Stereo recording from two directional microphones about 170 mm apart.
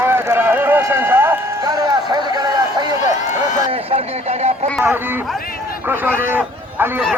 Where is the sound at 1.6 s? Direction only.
25° right (ahead or behind).